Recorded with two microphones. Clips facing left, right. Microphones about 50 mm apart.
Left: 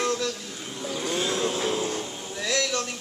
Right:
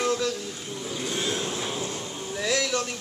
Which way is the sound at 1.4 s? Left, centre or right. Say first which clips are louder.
Left 5 dB; left.